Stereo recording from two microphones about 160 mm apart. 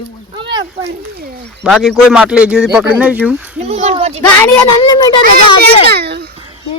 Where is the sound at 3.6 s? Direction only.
40° right (ahead or behind).